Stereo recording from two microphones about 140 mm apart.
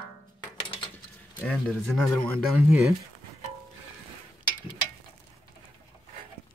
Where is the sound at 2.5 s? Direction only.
5° right (ahead or behind).